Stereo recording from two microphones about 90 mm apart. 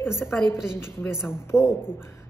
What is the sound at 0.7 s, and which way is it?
Speech, 30° left (ahead or behind).